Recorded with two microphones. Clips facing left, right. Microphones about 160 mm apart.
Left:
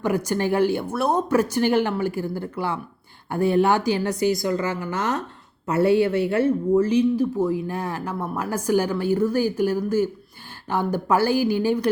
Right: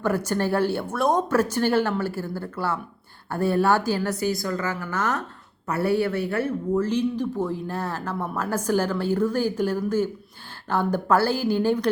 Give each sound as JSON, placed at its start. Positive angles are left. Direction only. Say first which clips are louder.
{"t": 0.0, "sound": "a woman's voice", "louder": "left 1 dB", "side_deg": 15}